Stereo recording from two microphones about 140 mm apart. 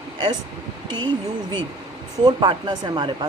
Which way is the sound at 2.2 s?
35° right (ahead or behind).